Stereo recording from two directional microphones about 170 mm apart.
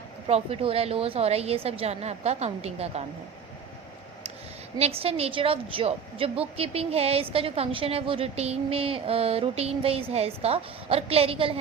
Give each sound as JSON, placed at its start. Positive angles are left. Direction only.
{"t": 0.3, "sound": "a woman's voice", "side_deg": -35}
{"t": 4.8, "sound": "a woman's voice", "side_deg": -35}